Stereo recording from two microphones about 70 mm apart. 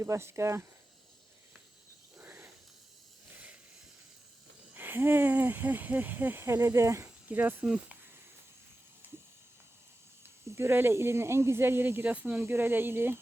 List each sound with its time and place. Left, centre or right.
0.0 s speech: right
2.1 s a sound: right
4.7 s speech: right
7.0 s speech: right
10.4 s speech: right